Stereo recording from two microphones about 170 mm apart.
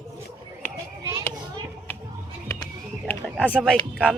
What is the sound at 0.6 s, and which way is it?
Children playing, 10° left (ahead or behind).